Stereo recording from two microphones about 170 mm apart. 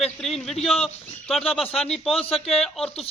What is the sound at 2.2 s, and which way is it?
Speech, 35° left (ahead or behind).